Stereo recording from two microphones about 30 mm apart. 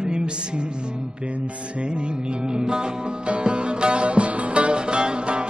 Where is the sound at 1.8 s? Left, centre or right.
Right.